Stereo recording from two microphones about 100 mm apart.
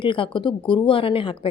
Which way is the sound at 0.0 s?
55° left (ahead or behind).